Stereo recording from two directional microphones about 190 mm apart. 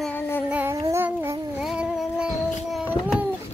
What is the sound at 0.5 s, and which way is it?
Child singing, 10° right (ahead or behind).